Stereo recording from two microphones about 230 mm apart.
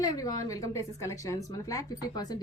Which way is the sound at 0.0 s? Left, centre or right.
Centre.